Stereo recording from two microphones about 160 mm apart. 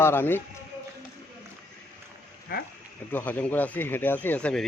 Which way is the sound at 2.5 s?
65° left (ahead or behind).